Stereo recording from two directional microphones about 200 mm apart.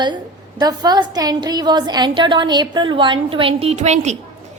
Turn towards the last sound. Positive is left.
turn(degrees=-35)  # may be behind; listen again after turning